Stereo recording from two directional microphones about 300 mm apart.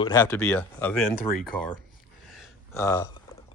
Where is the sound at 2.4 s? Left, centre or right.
Centre.